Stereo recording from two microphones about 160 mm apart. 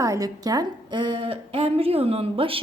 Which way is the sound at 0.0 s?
20° right (ahead or behind).